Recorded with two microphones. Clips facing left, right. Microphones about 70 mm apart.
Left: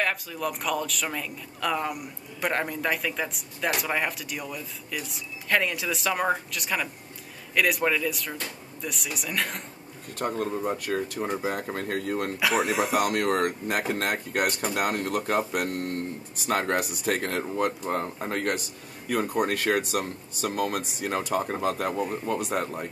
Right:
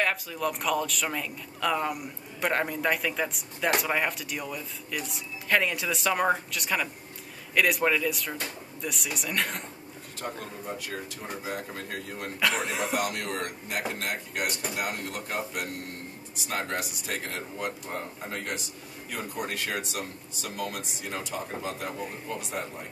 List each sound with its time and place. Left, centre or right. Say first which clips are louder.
0.0 s speech: even; centre
10.5 s a man's voice: left 8 dB; left
12.4 s speech: left 2 dB; centre
12.9 s a man's voice: left 6 dB; left